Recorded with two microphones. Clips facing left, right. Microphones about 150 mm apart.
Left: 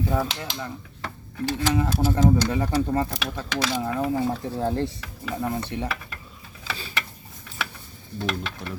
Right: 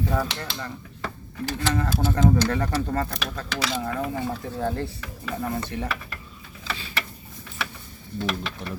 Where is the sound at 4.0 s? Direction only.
30° left (ahead or behind).